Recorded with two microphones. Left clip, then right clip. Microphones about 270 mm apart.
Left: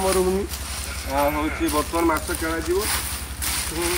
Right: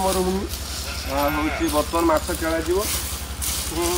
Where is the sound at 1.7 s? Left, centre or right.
Centre.